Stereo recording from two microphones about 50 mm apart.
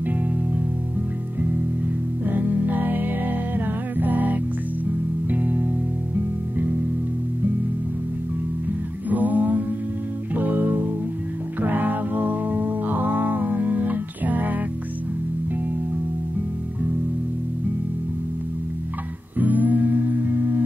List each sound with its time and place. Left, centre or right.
0.0 s music: right
2.2 s music: right
9.1 s music: right
19.3 s humming: right